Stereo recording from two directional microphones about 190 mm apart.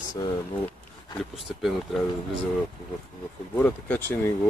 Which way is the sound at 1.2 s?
Centre (ahead or behind).